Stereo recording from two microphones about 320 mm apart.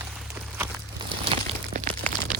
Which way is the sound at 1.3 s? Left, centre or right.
Centre.